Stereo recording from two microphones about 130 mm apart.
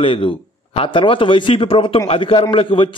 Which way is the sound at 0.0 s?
40° left (ahead or behind).